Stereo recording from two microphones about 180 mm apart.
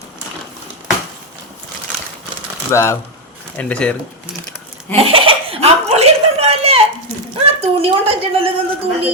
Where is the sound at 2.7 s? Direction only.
15° left (ahead or behind).